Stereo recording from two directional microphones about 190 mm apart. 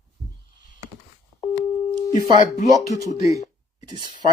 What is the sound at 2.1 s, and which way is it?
Speech, 40° left (ahead or behind).